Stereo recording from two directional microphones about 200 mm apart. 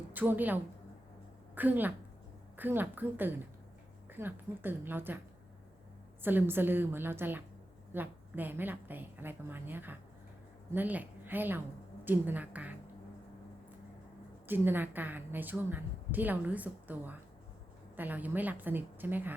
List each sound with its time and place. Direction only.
0.1 s a woman's voice: 10° right (ahead or behind)
6.2 s a woman's voice: 10° right (ahead or behind)
14.4 s a woman's voice: 10° right (ahead or behind)